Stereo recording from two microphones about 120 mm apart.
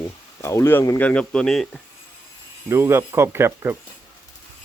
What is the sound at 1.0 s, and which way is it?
Speech, 10° left (ahead or behind).